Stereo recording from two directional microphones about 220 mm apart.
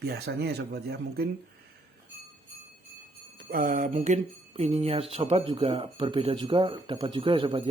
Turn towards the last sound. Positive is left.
turn(degrees=-25)  # may be behind; listen again after turning